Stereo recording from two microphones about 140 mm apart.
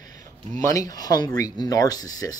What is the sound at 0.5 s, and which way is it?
Speech, 25° left (ahead or behind).